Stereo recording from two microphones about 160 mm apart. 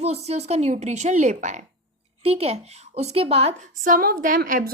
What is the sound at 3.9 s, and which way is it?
Speech, 65° right (ahead or behind).